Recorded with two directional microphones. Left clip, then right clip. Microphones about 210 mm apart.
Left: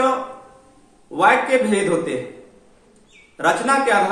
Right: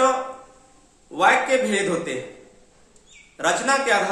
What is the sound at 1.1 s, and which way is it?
A man's voice, 20° right (ahead or behind).